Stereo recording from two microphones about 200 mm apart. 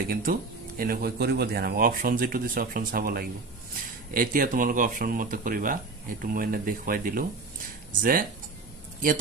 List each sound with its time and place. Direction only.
0.1 s speech: 45° right (ahead or behind)